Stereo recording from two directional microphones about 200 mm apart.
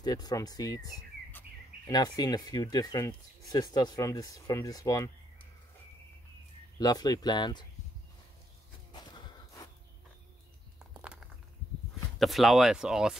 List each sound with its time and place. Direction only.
0.0 s speech: 20° left (ahead or behind)
6.8 s speech: 20° left (ahead or behind)
8.9 s snort: 20° left (ahead or behind)
10.9 s a sound: 5° right (ahead or behind)
12.2 s speech: centre (ahead or behind)